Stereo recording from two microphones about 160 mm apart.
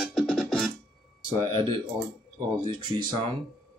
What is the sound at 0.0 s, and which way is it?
Music, 5° left (ahead or behind).